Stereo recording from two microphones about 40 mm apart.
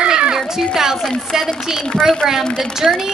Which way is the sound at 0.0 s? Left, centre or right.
Right.